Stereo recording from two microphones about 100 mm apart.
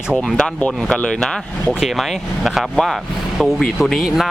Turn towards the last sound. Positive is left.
turn(degrees=-5)  # may be behind; listen again after turning